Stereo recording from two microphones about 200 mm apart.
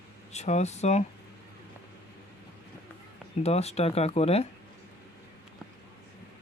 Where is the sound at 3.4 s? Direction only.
30° left (ahead or behind).